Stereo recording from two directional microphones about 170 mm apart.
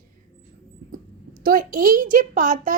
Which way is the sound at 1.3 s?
55° right (ahead or behind).